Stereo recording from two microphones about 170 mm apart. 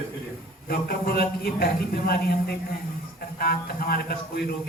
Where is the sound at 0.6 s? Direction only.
65° left (ahead or behind).